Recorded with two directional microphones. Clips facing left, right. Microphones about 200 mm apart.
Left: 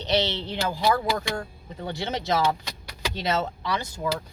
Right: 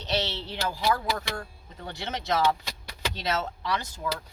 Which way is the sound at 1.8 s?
15° left (ahead or behind).